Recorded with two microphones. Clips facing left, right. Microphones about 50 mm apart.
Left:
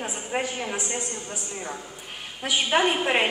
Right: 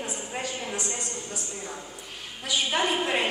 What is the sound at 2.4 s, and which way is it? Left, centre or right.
Speech, left.